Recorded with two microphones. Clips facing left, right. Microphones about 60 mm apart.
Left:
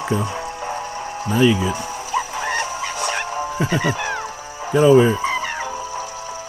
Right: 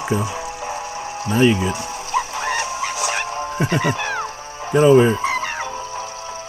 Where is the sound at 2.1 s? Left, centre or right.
Centre.